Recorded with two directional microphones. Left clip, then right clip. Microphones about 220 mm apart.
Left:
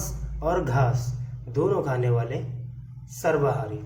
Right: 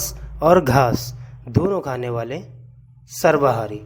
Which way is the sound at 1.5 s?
45° right (ahead or behind).